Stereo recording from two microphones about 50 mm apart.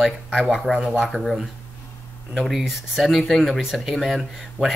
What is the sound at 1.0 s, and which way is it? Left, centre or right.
Speech, centre.